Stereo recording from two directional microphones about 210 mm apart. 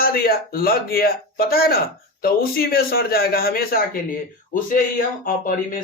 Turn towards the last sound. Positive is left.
turn(degrees=40)  # may be behind; listen again after turning